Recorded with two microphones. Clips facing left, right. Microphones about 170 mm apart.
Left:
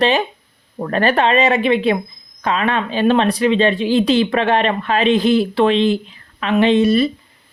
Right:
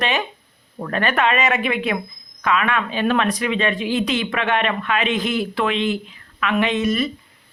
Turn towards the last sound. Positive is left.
turn(degrees=30)  # may be behind; listen again after turning